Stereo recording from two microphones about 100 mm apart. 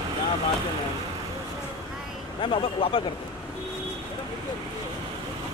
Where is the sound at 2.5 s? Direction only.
60° left (ahead or behind).